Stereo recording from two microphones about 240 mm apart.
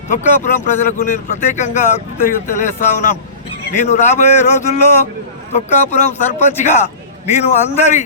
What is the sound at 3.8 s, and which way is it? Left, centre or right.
Speech, left.